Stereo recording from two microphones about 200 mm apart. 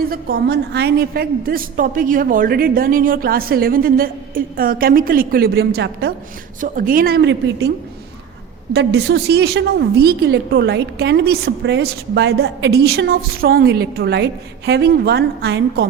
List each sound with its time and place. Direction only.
0.1 s a woman's voice: 55° right (ahead or behind)
6.6 s a woman's voice: 45° right (ahead or behind)
8.7 s a woman's voice: 60° right (ahead or behind)